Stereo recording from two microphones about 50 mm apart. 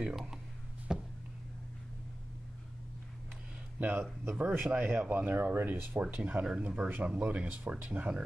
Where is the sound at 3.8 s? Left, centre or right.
Right.